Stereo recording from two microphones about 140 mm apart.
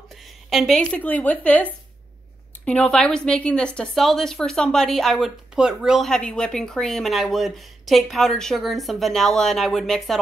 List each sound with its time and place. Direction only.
0.5 s a woman's voice: centre (ahead or behind)